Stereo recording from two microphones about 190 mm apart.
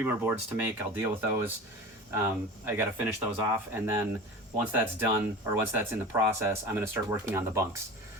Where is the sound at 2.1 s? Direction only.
10° right (ahead or behind).